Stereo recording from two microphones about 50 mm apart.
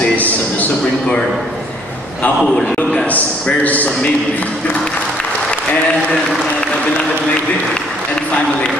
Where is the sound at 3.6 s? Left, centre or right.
Left.